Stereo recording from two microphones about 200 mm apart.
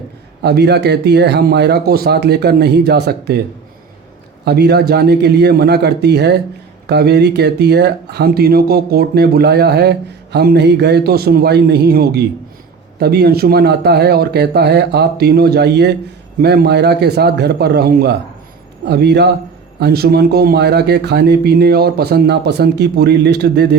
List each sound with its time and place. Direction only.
0.4 s speech: 55° right (ahead or behind)
4.4 s speech: 55° right (ahead or behind)